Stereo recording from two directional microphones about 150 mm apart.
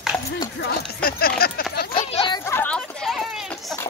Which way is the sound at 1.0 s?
90° left.